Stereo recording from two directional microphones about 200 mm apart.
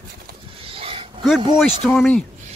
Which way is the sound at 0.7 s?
25° right (ahead or behind).